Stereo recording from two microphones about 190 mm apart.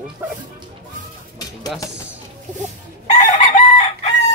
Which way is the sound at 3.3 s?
40° left (ahead or behind).